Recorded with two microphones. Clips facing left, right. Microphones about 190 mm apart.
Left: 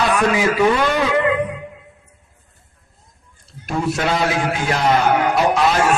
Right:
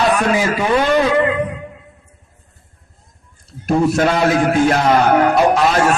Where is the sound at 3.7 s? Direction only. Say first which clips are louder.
Right 6 dB; 45° right (ahead or behind).